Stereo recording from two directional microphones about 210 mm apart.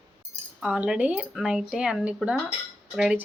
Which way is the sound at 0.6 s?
5° right (ahead or behind).